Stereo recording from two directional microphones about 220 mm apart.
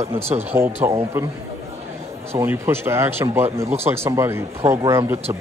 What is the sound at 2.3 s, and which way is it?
A man's voice, 10° right (ahead or behind).